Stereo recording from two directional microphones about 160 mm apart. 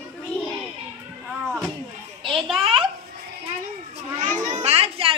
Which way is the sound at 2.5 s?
35° right (ahead or behind).